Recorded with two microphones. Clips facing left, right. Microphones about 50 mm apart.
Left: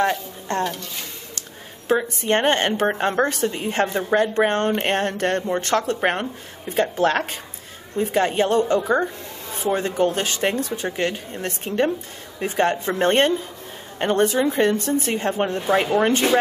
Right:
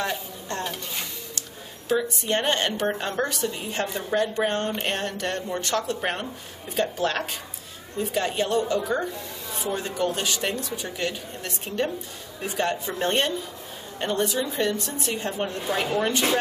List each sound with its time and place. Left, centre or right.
1.9 s speech: left